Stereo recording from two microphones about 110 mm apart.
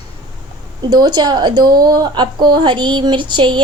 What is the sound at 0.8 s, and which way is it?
A woman's voice, 40° right (ahead or behind).